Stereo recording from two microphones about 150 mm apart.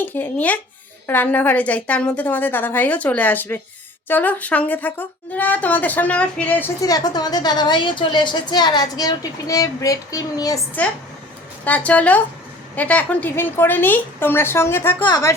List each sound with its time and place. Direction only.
0.0 s a woman's voice: 10° left (ahead or behind)
6.8 s a woman's voice: 25° left (ahead or behind)
11.6 s a woman's voice: 10° left (ahead or behind)
15.0 s a woman's voice: 25° left (ahead or behind)